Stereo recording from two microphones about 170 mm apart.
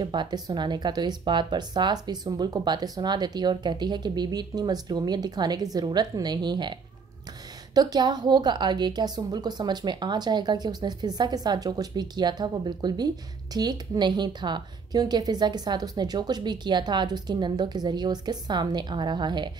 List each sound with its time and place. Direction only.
0.0 s a woman's voice: 25° right (ahead or behind)
7.7 s a woman's voice: 25° right (ahead or behind)